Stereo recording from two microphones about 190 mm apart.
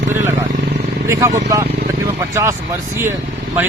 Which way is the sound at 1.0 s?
15° right (ahead or behind).